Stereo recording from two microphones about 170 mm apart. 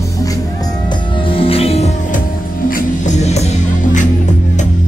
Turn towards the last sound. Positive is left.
turn(degrees=45)  # may be behind; listen again after turning